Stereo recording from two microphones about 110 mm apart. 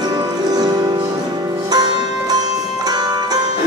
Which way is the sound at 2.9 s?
40° right (ahead or behind).